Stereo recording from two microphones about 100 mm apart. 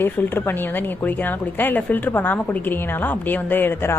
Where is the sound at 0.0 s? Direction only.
20° left (ahead or behind).